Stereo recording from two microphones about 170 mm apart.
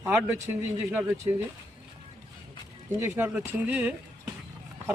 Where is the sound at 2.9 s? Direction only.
15° right (ahead or behind).